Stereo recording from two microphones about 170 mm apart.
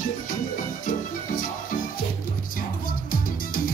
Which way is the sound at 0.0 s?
50° left (ahead or behind).